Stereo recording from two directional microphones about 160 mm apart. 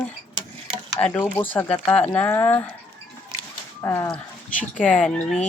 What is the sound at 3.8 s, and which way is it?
Speech, 15° left (ahead or behind).